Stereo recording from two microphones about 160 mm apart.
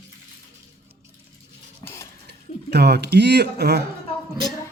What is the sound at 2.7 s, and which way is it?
Speech, 90° right.